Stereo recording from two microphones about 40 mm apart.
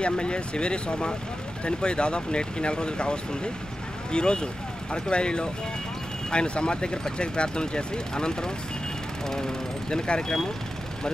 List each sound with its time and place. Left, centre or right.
0.0 s speech: left